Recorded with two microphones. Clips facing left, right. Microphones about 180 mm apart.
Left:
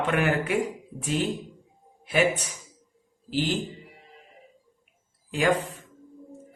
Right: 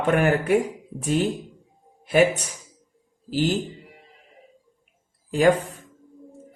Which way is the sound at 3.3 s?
40° right (ahead or behind).